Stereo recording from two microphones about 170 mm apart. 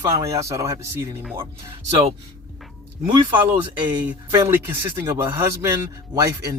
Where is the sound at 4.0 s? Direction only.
10° right (ahead or behind).